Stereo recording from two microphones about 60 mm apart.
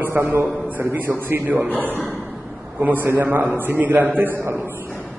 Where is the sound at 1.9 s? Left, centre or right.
Left.